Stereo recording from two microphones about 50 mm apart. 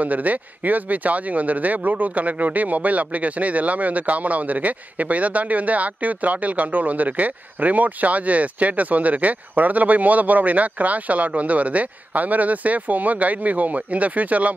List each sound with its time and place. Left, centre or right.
0.0 s speech: right